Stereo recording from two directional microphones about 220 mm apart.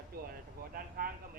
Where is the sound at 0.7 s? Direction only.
40° right (ahead or behind).